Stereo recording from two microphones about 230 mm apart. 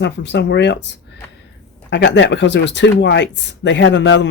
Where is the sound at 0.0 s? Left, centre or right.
Left.